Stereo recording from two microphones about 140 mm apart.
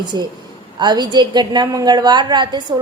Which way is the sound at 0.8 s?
30° right (ahead or behind).